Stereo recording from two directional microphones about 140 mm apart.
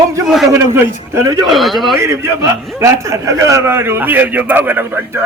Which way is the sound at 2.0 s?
20° right (ahead or behind).